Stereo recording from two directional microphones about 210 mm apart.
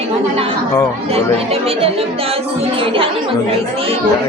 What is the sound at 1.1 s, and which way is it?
Speech, 30° right (ahead or behind).